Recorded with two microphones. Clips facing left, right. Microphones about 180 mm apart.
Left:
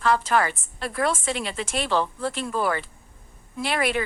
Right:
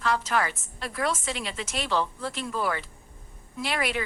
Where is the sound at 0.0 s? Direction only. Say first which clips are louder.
Left 5 dB; 55° left (ahead or behind).